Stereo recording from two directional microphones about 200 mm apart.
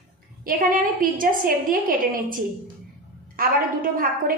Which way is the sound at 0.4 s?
45° right (ahead or behind).